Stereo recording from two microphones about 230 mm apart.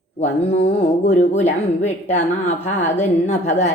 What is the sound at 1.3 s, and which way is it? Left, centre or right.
A woman's voice, left.